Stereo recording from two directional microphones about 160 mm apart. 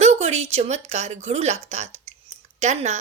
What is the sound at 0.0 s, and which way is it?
A woman's voice, 45° right (ahead or behind).